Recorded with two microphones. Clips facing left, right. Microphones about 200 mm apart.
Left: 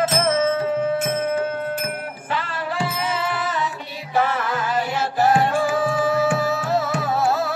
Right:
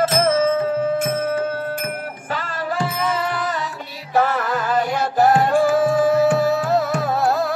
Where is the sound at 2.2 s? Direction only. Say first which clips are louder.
Right 1 dB; 45° right (ahead or behind).